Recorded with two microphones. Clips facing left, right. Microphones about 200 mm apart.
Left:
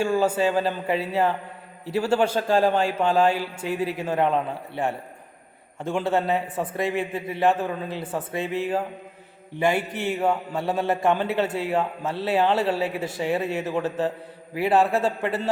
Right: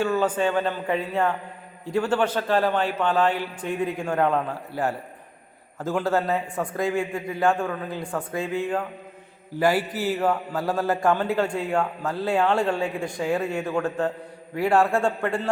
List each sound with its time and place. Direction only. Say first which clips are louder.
0.0 s speech: left 1 dB; 10° left (ahead or behind)
4.3 s speech: even; 20° left (ahead or behind)
5.8 s speech: even; centre (ahead or behind)